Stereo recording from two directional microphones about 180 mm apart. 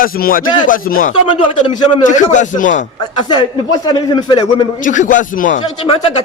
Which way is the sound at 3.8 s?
25° left (ahead or behind).